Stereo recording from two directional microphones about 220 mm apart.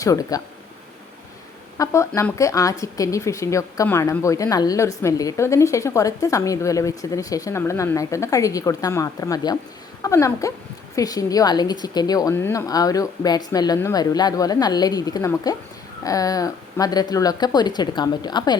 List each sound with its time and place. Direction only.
0.0 s speech: 15° left (ahead or behind)
1.8 s speech: 15° left (ahead or behind)